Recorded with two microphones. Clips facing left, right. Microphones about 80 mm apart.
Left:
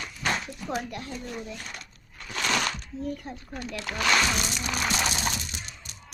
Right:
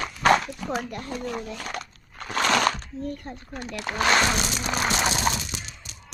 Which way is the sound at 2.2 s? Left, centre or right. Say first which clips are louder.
Right 6 dB; right.